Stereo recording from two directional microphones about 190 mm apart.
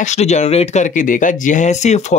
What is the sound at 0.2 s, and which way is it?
Speech, 35° left (ahead or behind).